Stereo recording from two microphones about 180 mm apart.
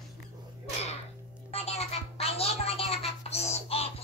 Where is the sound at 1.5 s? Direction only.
35° left (ahead or behind).